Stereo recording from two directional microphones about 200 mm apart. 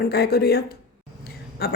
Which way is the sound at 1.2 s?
55° left (ahead or behind).